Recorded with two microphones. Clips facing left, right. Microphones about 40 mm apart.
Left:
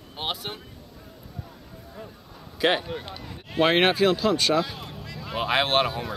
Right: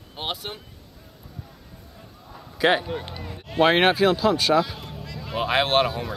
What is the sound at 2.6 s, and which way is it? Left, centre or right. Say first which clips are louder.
Speech: right 3 dB; centre.